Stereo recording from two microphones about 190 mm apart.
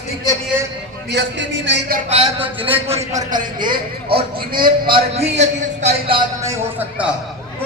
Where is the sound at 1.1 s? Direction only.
65° right (ahead or behind).